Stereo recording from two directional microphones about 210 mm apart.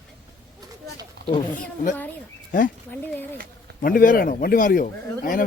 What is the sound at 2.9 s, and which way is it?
Speech, 10° left (ahead or behind).